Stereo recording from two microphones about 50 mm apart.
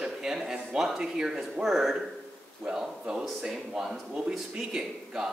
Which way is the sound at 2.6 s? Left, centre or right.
Centre.